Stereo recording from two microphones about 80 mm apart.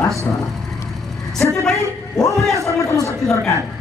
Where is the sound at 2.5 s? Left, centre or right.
Left.